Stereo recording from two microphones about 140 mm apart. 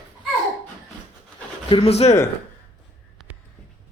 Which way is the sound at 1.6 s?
40° left (ahead or behind).